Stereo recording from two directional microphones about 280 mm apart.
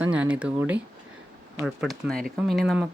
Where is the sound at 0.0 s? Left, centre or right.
Centre.